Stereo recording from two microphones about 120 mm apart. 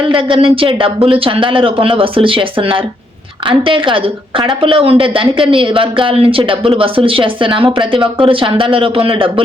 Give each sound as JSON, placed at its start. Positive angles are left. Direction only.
{"t": 0.1, "sound": "a woman's voice", "side_deg": -45}